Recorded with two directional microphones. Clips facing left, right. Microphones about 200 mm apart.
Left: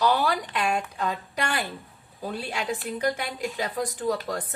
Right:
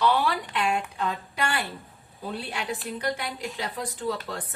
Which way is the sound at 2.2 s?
45° left (ahead or behind).